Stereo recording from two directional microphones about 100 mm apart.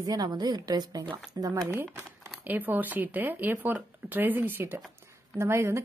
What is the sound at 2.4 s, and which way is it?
Speech, 20° right (ahead or behind).